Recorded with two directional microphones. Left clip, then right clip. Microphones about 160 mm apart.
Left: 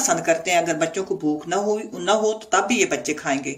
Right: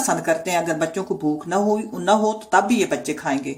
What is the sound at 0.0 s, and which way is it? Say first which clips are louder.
Speech: left 1 dB; 55° right (ahead or behind).